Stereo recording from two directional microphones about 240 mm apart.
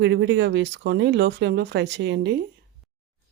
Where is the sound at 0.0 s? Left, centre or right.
Right.